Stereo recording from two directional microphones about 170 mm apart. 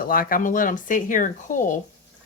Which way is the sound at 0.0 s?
55° left (ahead or behind).